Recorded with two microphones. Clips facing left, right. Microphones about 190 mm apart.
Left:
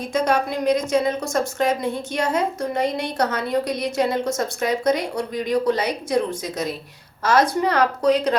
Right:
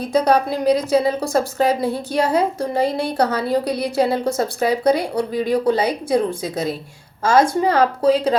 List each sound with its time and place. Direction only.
0.1 s a woman's voice: 35° right (ahead or behind)